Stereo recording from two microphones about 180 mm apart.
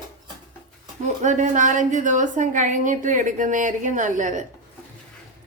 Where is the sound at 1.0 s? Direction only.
45° right (ahead or behind).